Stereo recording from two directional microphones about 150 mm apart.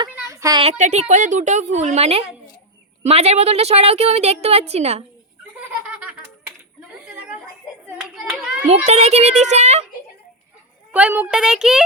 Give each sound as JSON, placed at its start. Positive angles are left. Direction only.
{"t": 0.0, "sound": "a sound", "side_deg": -20}
{"t": 0.6, "sound": "a woman's voice", "side_deg": -45}
{"t": 5.5, "sound": "a sound", "side_deg": -10}
{"t": 8.1, "sound": "hands", "side_deg": -5}
{"t": 8.9, "sound": "a woman's voice", "side_deg": -45}
{"t": 10.9, "sound": "speech", "side_deg": -10}